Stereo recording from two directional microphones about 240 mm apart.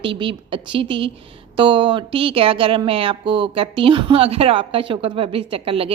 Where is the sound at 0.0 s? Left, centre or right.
Right.